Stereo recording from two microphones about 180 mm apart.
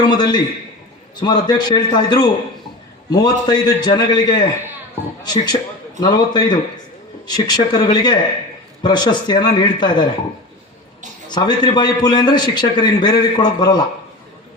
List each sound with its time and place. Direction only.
0.0 s a man's voice: 25° left (ahead or behind)
11.3 s a man's voice: 25° left (ahead or behind)